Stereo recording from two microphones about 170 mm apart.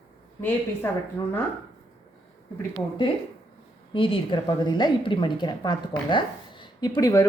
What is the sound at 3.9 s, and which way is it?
A woman's voice, 30° left (ahead or behind).